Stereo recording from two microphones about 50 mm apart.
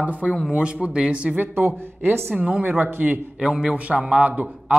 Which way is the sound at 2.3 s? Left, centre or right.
Centre.